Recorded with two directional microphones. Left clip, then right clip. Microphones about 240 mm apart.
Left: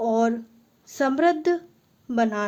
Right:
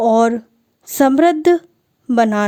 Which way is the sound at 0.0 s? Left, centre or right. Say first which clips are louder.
Right 9 dB; right.